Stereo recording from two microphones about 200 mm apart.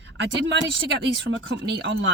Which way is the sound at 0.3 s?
65° right (ahead or behind).